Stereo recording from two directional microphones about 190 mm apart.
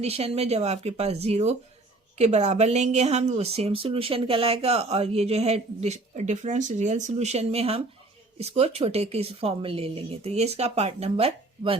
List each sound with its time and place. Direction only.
0.0 s a woman's voice: 30° right (ahead or behind)